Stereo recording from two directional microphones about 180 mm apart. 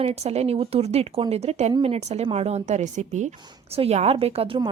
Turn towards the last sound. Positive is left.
turn(degrees=-30)  # may be behind; listen again after turning